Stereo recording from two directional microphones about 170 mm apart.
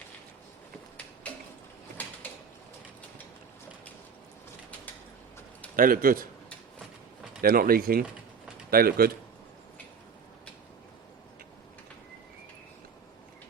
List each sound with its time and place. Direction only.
5.7 s speech: 55° right (ahead or behind)
7.4 s speech: 60° right (ahead or behind)